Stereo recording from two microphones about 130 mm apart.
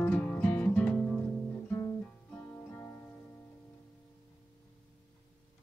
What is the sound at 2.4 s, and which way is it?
Music, 15° left (ahead or behind).